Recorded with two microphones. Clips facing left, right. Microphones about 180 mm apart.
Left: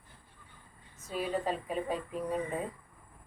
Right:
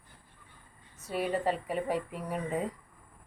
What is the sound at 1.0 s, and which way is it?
A woman's voice, 70° right (ahead or behind).